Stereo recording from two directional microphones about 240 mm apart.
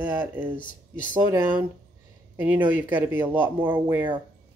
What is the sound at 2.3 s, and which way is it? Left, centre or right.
Speech, centre.